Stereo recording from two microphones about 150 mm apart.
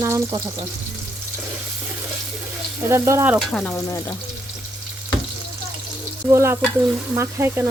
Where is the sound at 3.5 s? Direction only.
Centre (ahead or behind).